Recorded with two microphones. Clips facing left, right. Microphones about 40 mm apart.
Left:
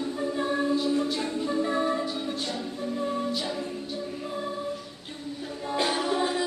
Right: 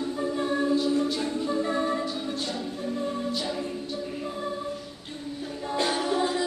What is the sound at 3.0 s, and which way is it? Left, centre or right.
Music, centre.